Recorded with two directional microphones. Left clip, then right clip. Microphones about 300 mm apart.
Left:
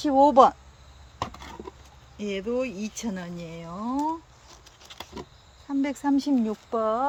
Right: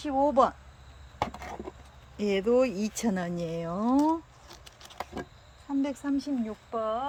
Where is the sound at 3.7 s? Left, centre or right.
Right.